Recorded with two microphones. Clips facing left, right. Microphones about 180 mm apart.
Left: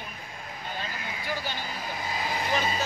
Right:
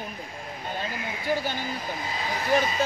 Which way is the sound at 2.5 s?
50° right (ahead or behind).